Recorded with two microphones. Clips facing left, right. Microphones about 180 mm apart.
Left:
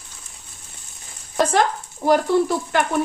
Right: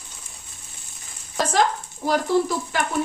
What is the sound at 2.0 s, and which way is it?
Speech, 60° left (ahead or behind).